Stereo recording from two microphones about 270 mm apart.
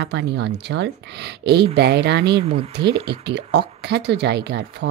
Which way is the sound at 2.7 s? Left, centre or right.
Right.